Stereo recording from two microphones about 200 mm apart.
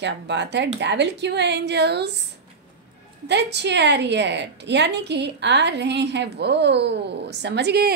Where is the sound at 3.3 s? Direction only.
55° right (ahead or behind).